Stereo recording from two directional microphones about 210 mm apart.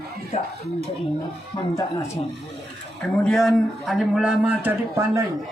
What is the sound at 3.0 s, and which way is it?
Speech, centre (ahead or behind).